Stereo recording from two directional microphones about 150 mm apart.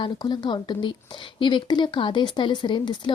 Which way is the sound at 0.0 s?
30° left (ahead or behind).